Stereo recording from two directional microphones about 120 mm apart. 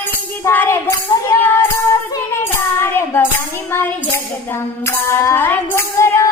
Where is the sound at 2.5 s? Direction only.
20° left (ahead or behind).